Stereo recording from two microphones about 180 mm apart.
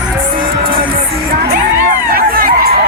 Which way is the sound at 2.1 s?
55° right (ahead or behind).